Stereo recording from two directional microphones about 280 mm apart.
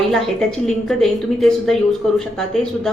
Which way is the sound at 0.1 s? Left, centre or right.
Centre.